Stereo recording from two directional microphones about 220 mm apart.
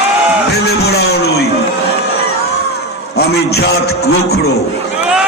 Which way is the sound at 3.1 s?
45° left (ahead or behind).